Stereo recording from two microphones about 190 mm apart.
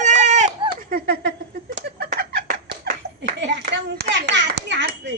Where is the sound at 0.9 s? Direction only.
55° right (ahead or behind).